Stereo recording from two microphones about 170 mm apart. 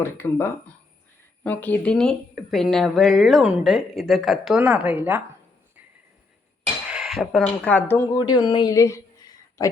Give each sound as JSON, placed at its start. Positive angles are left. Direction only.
{"t": 0.0, "sound": "a woman's voice", "side_deg": 15}
{"t": 6.9, "sound": "dishes", "side_deg": 0}
{"t": 7.6, "sound": "speech", "side_deg": 10}
{"t": 8.2, "sound": "speech", "side_deg": 25}